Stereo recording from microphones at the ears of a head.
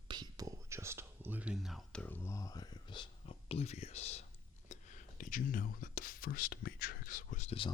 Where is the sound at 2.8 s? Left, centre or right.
Left.